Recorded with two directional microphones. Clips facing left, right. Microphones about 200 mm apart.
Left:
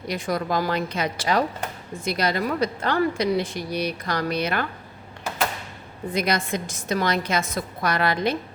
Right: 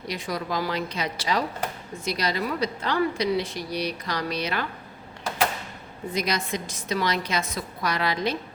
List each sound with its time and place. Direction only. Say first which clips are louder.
0.1 s speech: left 5 dB; 50° left (ahead or behind)
6.1 s speech: left 3 dB; 55° left (ahead or behind)